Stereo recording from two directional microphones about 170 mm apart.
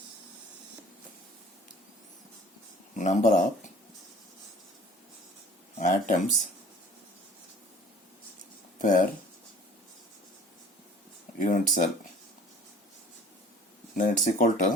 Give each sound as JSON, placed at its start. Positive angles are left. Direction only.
{"t": 2.9, "sound": "speech", "side_deg": 45}
{"t": 5.7, "sound": "speech", "side_deg": 50}
{"t": 8.8, "sound": "speech", "side_deg": 50}
{"t": 11.4, "sound": "speech", "side_deg": 50}
{"t": 13.9, "sound": "speech", "side_deg": 50}